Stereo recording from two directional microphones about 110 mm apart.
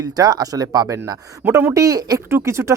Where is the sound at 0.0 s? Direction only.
35° right (ahead or behind).